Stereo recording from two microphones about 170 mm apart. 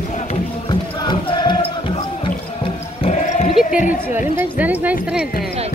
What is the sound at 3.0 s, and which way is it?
Bleat, 45° left (ahead or behind).